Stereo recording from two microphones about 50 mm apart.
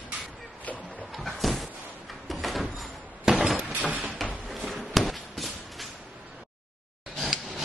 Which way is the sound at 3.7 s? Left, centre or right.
Right.